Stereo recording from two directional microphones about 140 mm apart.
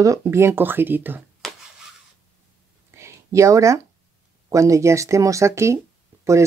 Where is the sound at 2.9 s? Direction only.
20° right (ahead or behind).